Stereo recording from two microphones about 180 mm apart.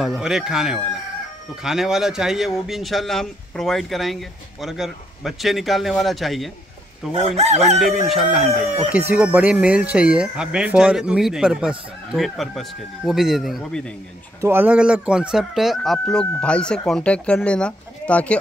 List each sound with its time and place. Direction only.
0.0 s speech: centre (ahead or behind)
7.2 s chicken: 35° right (ahead or behind)
7.6 s speech: centre (ahead or behind)
14.4 s speech: 10° right (ahead or behind); by 18.4 s 5° left (ahead or behind)